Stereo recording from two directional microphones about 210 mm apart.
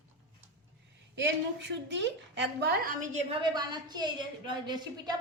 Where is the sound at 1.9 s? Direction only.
60° right (ahead or behind); by 3.3 s 35° right (ahead or behind).